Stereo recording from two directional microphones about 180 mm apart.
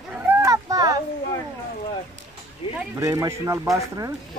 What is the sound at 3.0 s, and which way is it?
Speech, 15° right (ahead or behind).